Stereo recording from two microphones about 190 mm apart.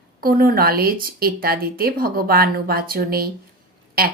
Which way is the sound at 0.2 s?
50° right (ahead or behind).